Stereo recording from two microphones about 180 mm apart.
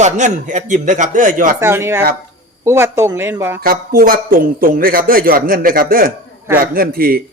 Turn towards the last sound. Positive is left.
turn(degrees=-55)  # may be behind; listen again after turning